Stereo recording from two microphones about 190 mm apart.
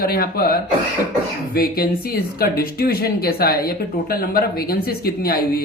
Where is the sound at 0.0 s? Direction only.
50° left (ahead or behind).